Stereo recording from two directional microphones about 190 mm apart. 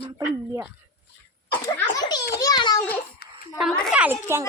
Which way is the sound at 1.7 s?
20° left (ahead or behind).